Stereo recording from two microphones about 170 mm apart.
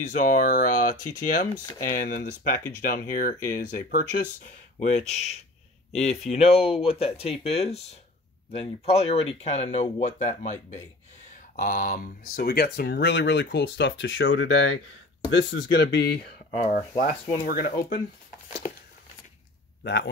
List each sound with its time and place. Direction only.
0.0 s speech: 50° left (ahead or behind); by 16.3 s 70° left (ahead or behind)
16.4 s speech: 45° left (ahead or behind)
17.0 s speech: 60° left (ahead or behind)
19.8 s a man's voice: 85° left